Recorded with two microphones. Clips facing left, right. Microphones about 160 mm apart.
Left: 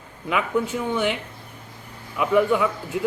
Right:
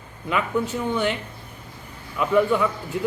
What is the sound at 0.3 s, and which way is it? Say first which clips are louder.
Speech: left 1 dB; 10° left (ahead or behind).